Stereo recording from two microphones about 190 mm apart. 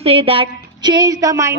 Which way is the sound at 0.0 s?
30° right (ahead or behind).